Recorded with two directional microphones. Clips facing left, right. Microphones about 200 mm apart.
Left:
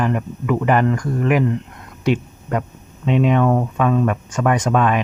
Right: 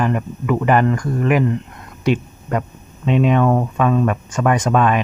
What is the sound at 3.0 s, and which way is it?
Speech, 40° right (ahead or behind).